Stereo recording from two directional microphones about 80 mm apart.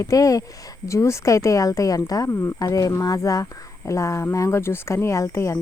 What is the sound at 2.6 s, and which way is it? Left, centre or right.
Speech, left.